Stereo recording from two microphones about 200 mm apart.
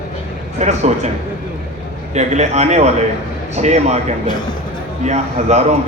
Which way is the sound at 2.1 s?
35° right (ahead or behind).